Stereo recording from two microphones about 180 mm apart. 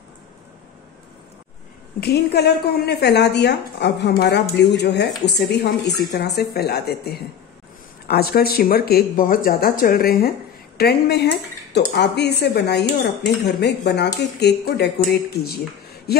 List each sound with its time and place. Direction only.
2.0 s speech: 65° left (ahead or behind)